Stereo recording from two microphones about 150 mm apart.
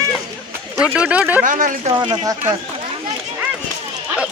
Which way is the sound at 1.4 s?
60° right (ahead or behind).